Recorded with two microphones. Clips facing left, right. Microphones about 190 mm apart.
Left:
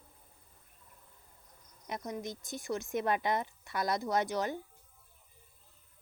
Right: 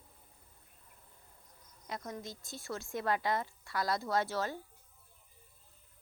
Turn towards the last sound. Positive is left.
turn(degrees=15)  # may be behind; listen again after turning